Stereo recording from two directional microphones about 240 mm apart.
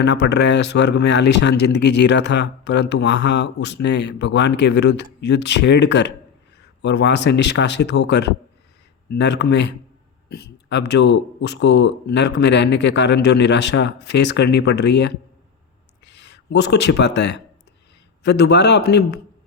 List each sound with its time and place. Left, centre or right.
0.0 s speech: left